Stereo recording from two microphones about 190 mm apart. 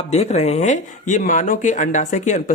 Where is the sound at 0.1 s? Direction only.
35° left (ahead or behind).